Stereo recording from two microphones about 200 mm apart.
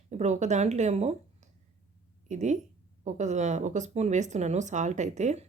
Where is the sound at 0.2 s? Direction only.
35° right (ahead or behind).